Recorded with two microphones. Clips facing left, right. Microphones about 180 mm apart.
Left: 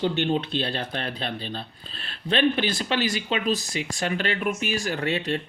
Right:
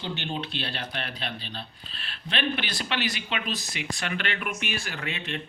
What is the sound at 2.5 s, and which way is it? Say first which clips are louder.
Speech: left 6 dB; 45° left (ahead or behind).